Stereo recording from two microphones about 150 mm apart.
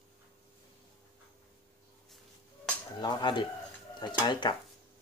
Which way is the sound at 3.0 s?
30° left (ahead or behind).